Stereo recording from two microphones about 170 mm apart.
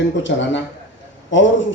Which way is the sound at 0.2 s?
90° left.